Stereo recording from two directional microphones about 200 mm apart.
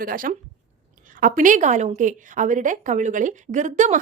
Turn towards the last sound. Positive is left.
turn(degrees=-40)  # may be behind; listen again after turning